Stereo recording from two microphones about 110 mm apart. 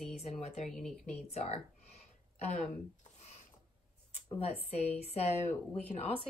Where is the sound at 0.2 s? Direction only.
70° left (ahead or behind).